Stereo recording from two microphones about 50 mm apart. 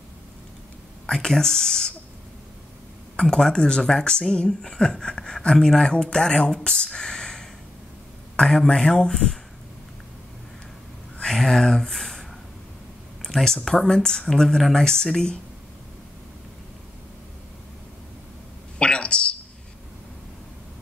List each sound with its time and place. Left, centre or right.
1.0 s speech: centre
3.2 s speech: centre
11.2 s speech: centre
18.8 s a sound: centre